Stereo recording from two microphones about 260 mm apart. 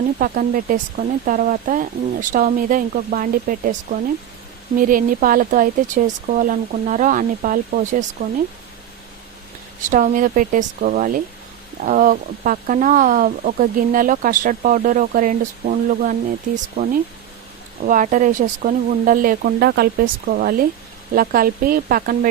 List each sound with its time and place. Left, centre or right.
0.2 s speech: right
9.8 s speech: right